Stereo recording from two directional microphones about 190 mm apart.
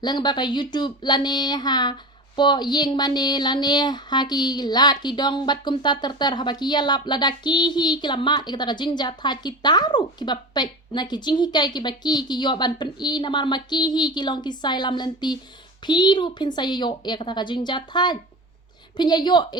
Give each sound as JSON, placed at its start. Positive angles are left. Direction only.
{"t": 0.0, "sound": "speech", "side_deg": 20}